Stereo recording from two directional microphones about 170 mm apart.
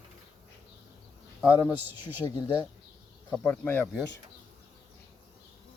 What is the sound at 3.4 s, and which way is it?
Speech, 10° left (ahead or behind).